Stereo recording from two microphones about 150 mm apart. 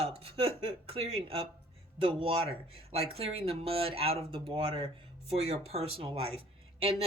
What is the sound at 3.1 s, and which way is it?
Speech, 40° right (ahead or behind).